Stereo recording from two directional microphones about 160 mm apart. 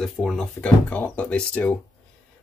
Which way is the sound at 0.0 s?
5° left (ahead or behind).